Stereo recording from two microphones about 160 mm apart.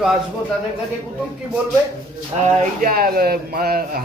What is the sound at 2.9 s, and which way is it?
Speech, 70° right (ahead or behind).